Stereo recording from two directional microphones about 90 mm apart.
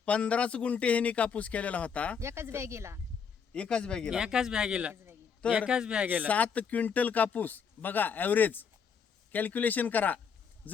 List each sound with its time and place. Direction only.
0.0 s a man's voice: 15° left (ahead or behind)
2.1 s speech: 30° right (ahead or behind)
3.5 s a man's voice: 10° left (ahead or behind)
4.1 s a man's voice: 10° right (ahead or behind)
6.2 s speech: 15° left (ahead or behind)